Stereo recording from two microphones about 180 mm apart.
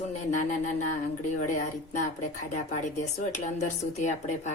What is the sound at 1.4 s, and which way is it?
Speech, 45° left (ahead or behind).